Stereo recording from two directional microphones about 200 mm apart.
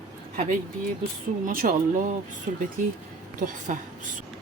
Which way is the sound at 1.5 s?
40° right (ahead or behind).